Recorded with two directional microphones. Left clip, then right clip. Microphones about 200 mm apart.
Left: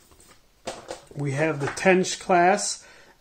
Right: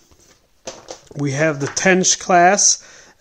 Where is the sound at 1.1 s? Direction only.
40° right (ahead or behind).